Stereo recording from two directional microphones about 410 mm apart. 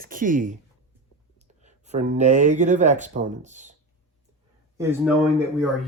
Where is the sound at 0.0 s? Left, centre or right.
Centre.